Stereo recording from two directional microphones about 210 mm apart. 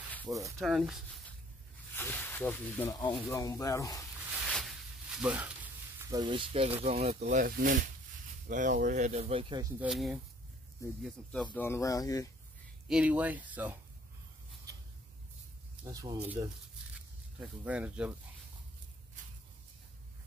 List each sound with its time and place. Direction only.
0.2 s speech: 15° right (ahead or behind)
0.6 s speech: centre (ahead or behind)
2.0 s speech: 10° left (ahead or behind)
4.5 s sizzle: centre (ahead or behind); by 6.7 s 25° right (ahead or behind)
6.8 s speech: 30° right (ahead or behind)
7.2 s speech: 40° right (ahead or behind); by 9.7 s 25° right (ahead or behind)
9.8 s speech: centre (ahead or behind)
11.5 s speech: 10° left (ahead or behind)
12.8 s speech: 5° right (ahead or behind)
15.8 s speech: 15° right (ahead or behind)